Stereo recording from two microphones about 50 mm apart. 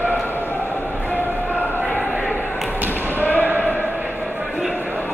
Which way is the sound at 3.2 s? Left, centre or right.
Left.